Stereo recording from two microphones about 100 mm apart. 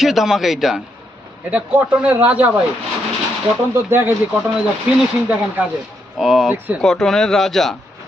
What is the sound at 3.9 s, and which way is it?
Speech, 20° right (ahead or behind).